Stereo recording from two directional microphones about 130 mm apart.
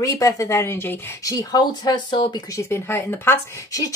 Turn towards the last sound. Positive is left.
turn(degrees=20)  # may be behind; listen again after turning